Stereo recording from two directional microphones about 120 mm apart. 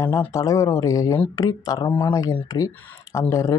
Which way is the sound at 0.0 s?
30° left (ahead or behind).